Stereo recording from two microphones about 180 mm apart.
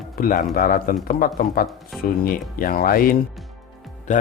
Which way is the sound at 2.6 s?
55° left (ahead or behind).